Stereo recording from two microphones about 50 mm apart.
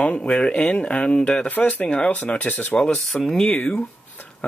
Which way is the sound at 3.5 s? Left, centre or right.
Left.